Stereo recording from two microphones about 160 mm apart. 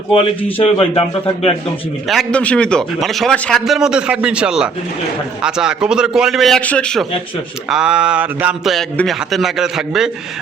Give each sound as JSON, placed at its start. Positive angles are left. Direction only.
{"t": 0.5, "sound": "a man's voice", "side_deg": 35}
{"t": 2.0, "sound": "a man's voice", "side_deg": 5}